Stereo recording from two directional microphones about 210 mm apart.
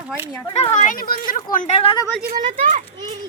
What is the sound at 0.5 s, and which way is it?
Speech, 30° left (ahead or behind).